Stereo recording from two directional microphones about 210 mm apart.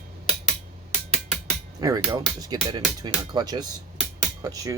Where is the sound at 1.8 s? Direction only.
15° right (ahead or behind).